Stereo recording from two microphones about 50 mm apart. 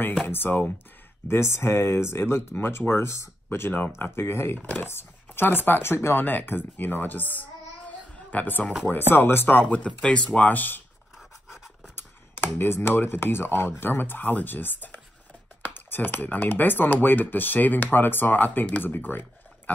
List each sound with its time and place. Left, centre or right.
0.3 s speech: left
2.5 s speech: left
2.9 s speech: left
3.4 s speech: left
4.6 s speech: left
4.8 s speech: left
6.2 s speech: left
10.0 s speech: left
11.5 s speech: left